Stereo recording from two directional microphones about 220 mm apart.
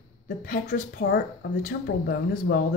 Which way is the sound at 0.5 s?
40° left (ahead or behind).